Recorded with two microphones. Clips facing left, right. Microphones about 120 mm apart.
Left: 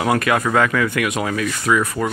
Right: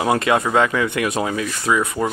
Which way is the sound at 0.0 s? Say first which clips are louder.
Even; 25° right (ahead or behind).